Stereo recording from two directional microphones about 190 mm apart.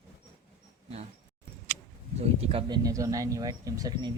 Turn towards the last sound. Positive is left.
turn(degrees=-20)  # may be behind; listen again after turning